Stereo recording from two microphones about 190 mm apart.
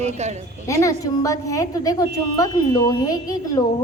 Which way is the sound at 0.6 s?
15° left (ahead or behind).